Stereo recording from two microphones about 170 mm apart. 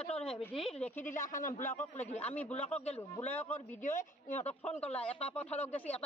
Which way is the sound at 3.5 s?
45° left (ahead or behind).